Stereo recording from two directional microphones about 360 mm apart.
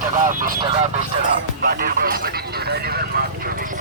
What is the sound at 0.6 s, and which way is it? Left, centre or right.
Speech, centre.